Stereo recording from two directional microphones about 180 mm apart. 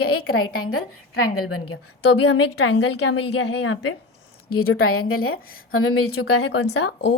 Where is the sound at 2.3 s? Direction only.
75° left (ahead or behind).